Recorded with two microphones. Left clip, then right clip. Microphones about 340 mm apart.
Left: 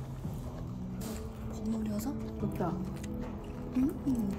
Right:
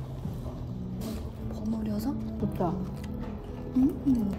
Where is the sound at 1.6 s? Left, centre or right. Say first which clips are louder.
Right 4 dB; centre.